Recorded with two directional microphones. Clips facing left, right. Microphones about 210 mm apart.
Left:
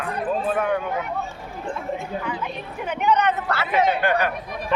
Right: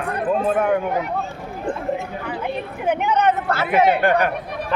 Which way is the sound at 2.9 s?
50° right (ahead or behind).